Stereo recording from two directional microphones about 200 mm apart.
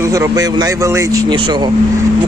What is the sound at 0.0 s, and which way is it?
A man's voice, 15° right (ahead or behind).